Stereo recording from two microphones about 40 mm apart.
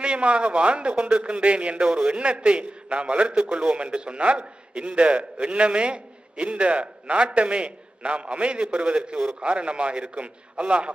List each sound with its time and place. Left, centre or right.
0.0 s a man's voice: right
1.8 s a man's voice: centre
2.1 s a man's voice: right